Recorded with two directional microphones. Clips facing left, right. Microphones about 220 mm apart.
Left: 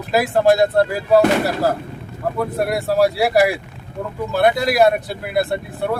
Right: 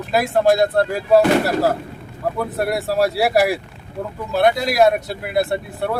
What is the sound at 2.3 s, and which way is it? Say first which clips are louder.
Speech: left 2 dB; centre (ahead or behind).